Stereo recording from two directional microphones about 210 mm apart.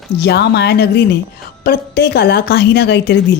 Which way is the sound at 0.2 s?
50° left (ahead or behind).